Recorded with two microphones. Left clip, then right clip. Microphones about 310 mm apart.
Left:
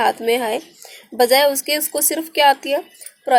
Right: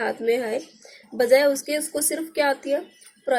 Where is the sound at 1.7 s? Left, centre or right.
Left.